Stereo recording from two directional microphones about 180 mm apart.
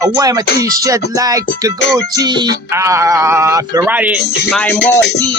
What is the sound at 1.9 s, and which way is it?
Speech, 20° right (ahead or behind).